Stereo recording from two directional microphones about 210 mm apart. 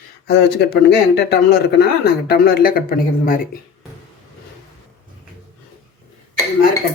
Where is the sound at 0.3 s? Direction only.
50° left (ahead or behind).